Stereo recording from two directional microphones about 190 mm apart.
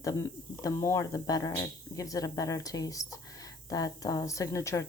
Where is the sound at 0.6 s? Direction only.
15° left (ahead or behind).